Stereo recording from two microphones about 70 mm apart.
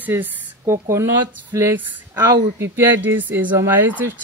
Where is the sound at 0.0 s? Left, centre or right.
Right.